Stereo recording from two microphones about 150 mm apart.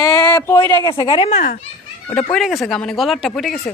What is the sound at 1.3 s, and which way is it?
Speech, 55° left (ahead or behind).